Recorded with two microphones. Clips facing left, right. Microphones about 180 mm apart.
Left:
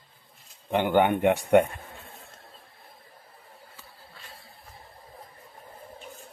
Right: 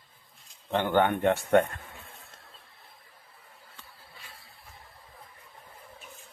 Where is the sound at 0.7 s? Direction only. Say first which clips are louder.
Left 3 dB; 15° left (ahead or behind).